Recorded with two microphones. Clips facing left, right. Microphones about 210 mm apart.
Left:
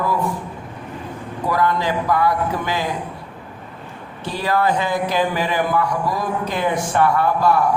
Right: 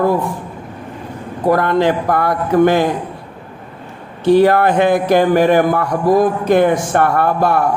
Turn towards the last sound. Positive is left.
turn(degrees=-60)  # may be behind; listen again after turning